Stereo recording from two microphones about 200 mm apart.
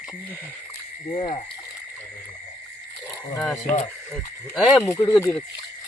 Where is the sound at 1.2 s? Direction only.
25° left (ahead or behind).